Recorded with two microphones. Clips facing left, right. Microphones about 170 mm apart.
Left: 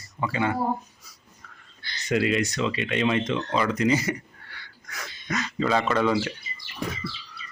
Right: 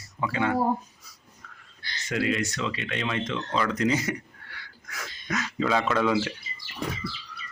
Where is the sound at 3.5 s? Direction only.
5° left (ahead or behind).